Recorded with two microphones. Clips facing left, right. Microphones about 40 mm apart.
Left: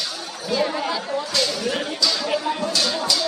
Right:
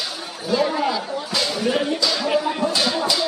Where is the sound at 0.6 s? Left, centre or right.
Centre.